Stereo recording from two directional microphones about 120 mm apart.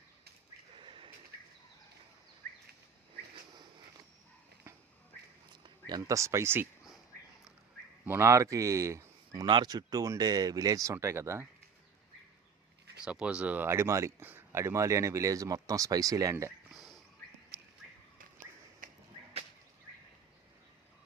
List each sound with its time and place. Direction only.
0.8 s a sound: 45° right (ahead or behind)
5.9 s speech: 25° right (ahead or behind)
8.0 s speech: 20° right (ahead or behind)
9.5 s speech: 35° right (ahead or behind)
13.1 s speech: 10° right (ahead or behind); by 16.5 s 25° right (ahead or behind)
16.7 s a sound: centre (ahead or behind)
18.8 s whip: 90° right